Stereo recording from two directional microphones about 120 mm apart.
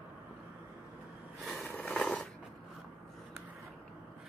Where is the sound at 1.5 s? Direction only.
10° left (ahead or behind).